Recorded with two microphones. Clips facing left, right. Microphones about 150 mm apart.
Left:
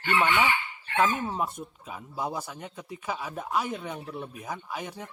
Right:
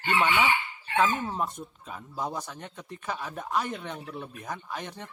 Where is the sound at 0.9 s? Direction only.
10° left (ahead or behind).